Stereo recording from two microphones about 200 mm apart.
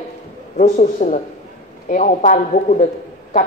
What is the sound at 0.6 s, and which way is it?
A woman's voice, 35° left (ahead or behind).